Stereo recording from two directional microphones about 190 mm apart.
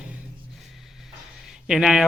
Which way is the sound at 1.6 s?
5° right (ahead or behind).